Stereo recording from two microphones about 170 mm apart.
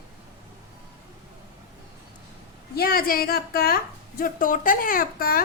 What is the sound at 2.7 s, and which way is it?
A child's voice, 65° left (ahead or behind).